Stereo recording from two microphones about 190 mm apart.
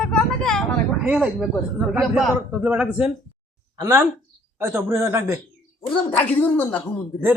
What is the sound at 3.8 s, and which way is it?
A man's voice, 15° right (ahead or behind).